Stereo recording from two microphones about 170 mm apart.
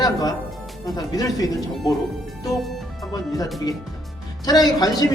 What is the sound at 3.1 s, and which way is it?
A man's voice, 20° left (ahead or behind).